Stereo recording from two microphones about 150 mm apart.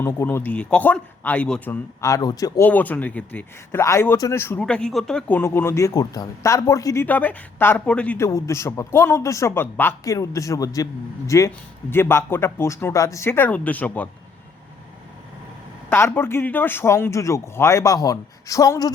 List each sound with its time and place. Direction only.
0.0 s speech: 15° left (ahead or behind)
2.6 s speech: 10° left (ahead or behind)
4.6 s speech: 5° left (ahead or behind)
5.4 s a man's voice: 15° left (ahead or behind)
15.9 s a man's voice: 15° left (ahead or behind)